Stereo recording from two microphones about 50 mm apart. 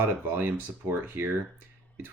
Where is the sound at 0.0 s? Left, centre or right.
Right.